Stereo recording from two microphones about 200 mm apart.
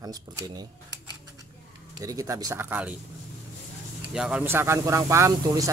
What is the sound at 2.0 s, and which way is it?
Speech, 15° right (ahead or behind).